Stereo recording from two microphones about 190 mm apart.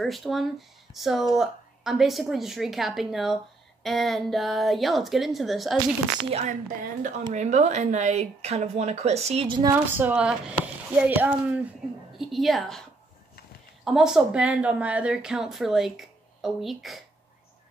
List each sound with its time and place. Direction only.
0.0 s speech: centre (ahead or behind)
7.0 s speech: 35° right (ahead or behind)
9.9 s speech: 10° right (ahead or behind)
13.8 s speech: centre (ahead or behind)